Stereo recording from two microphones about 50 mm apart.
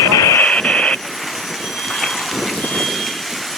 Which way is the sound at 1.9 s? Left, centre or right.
Centre.